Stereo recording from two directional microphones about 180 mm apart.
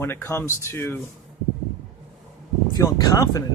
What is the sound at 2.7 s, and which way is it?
Speech, 20° left (ahead or behind).